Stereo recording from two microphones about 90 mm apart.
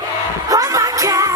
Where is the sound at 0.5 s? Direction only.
40° right (ahead or behind).